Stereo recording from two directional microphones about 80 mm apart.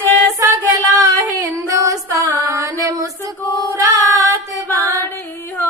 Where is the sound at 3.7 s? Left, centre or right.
Right.